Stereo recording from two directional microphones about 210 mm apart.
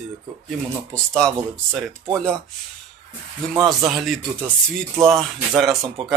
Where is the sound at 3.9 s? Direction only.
Centre (ahead or behind).